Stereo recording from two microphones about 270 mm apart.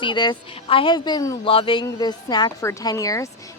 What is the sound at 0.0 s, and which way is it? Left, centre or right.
Speech, centre.